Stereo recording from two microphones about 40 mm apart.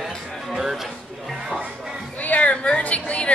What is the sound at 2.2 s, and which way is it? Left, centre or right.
A woman's voice, left.